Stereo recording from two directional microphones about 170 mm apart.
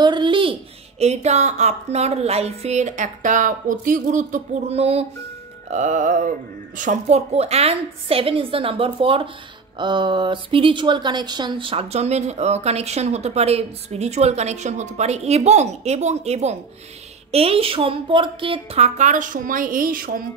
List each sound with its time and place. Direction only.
0.0 s speech: 25° right (ahead or behind)
5.7 s music: 45° right (ahead or behind)
6.8 s speech: 45° right (ahead or behind)